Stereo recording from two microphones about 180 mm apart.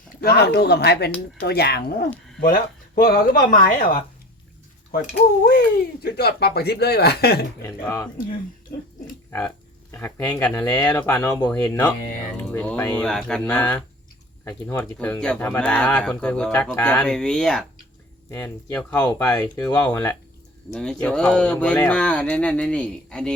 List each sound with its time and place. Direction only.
0.2 s speech: 60° left (ahead or behind)
2.4 s speech: 50° left (ahead or behind)
5.5 s speech: 60° left (ahead or behind)
7.9 s speech: 15° left (ahead or behind)
9.9 s speech: 10° left (ahead or behind)